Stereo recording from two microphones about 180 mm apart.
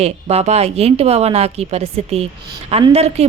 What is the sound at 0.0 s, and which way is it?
A woman's voice, 35° right (ahead or behind).